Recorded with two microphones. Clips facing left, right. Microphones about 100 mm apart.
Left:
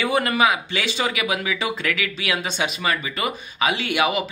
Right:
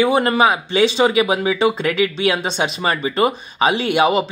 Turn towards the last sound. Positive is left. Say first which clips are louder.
# right 6 dB
turn(degrees=-30)  # may be behind; listen again after turning